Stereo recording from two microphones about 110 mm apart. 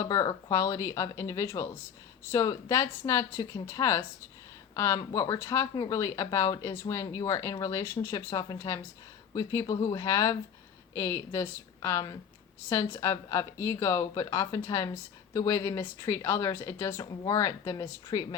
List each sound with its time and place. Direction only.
0.0 s a woman's voice: 30° left (ahead or behind)